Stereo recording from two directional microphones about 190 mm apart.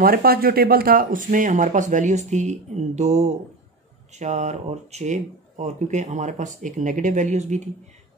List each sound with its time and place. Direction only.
0.0 s speech: 50° right (ahead or behind)